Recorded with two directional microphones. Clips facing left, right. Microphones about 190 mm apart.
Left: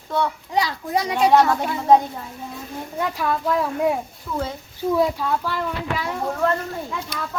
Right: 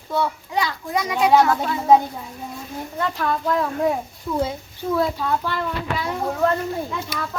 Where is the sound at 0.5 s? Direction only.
35° left (ahead or behind).